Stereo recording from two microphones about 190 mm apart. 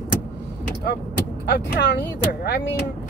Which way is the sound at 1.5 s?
55° left (ahead or behind).